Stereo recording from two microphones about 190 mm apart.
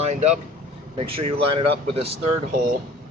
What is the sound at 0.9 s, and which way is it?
Speech, 30° right (ahead or behind).